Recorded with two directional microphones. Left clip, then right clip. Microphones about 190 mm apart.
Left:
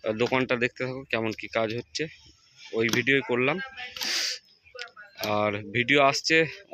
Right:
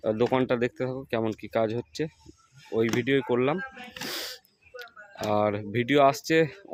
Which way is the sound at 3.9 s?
20° right (ahead or behind).